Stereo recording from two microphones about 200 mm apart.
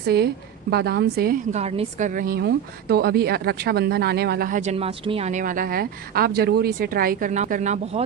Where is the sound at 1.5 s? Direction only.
30° right (ahead or behind).